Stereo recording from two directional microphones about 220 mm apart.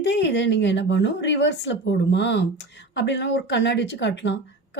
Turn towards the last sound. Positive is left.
turn(degrees=55)  # may be behind; listen again after turning